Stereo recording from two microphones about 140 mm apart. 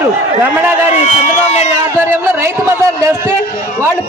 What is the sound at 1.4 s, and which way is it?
Speech, 55° left (ahead or behind).